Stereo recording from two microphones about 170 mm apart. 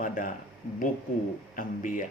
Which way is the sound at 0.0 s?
50° left (ahead or behind).